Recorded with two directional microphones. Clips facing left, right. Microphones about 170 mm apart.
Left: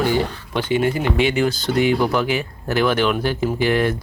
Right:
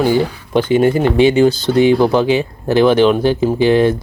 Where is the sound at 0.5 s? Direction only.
40° right (ahead or behind).